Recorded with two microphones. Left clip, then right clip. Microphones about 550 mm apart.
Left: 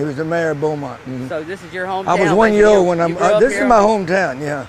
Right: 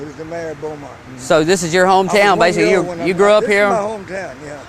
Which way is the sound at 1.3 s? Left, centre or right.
Right.